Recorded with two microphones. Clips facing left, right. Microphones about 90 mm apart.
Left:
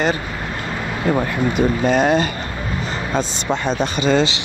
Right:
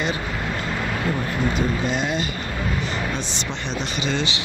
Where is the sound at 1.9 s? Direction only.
45° left (ahead or behind).